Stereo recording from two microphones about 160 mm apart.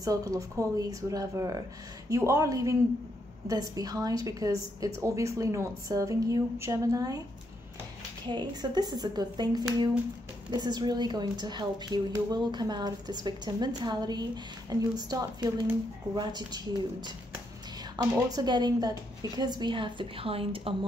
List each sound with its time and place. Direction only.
0.0 s a woman's voice: 20° right (ahead or behind)
8.3 s a woman's voice: 25° right (ahead or behind)